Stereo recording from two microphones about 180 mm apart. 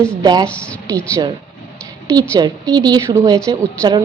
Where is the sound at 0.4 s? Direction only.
5° left (ahead or behind).